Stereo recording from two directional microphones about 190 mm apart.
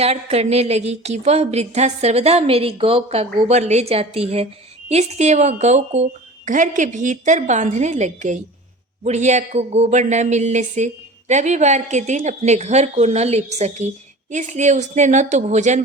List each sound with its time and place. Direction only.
0.0 s speech: 35° right (ahead or behind)